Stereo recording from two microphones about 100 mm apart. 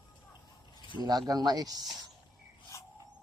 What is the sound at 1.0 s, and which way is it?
Speech, 40° right (ahead or behind).